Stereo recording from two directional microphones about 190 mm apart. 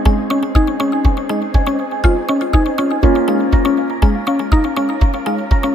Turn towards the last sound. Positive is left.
turn(degrees=0)  # may be behind; listen again after turning